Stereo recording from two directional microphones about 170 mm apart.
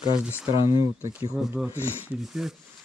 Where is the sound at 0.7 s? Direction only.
15° right (ahead or behind).